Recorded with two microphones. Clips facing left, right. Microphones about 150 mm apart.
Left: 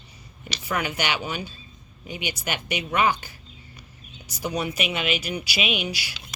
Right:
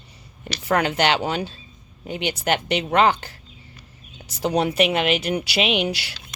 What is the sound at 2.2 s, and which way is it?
Speech, 55° right (ahead or behind).